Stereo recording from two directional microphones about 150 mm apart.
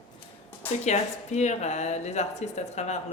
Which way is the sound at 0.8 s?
50° left (ahead or behind).